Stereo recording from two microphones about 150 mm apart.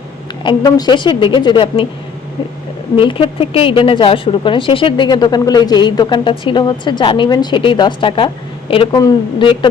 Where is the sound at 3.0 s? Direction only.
35° left (ahead or behind).